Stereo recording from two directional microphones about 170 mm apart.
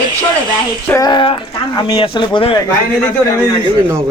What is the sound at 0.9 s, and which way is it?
Speech, 25° left (ahead or behind).